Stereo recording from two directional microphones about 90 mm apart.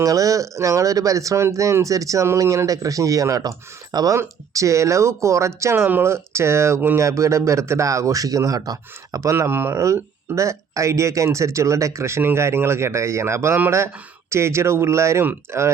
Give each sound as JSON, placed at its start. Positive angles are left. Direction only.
{"t": 0.0, "sound": "speech", "side_deg": -40}
{"t": 9.3, "sound": "speech", "side_deg": -25}